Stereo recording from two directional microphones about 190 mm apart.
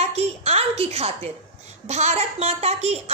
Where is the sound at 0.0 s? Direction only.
35° right (ahead or behind).